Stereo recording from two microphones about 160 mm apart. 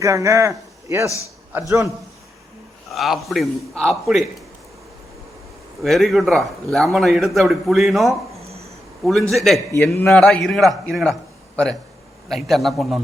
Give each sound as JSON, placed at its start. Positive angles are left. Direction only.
{"t": 0.0, "sound": "a man's voice", "side_deg": -20}
{"t": 2.9, "sound": "a man's voice", "side_deg": 0}
{"t": 5.8, "sound": "a man's voice", "side_deg": 0}
{"t": 8.4, "sound": "a sound", "side_deg": -40}
{"t": 9.0, "sound": "a man's voice", "side_deg": 0}
{"t": 9.7, "sound": "a man's voice", "side_deg": 15}